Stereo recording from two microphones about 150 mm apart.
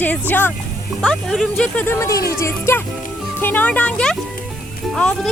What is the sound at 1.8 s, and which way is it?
Speech, 20° left (ahead or behind).